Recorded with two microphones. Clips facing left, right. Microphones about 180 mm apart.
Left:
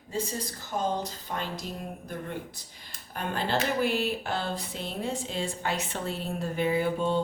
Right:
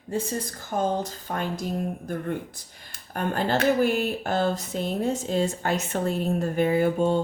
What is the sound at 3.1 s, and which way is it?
Speech, 50° right (ahead or behind).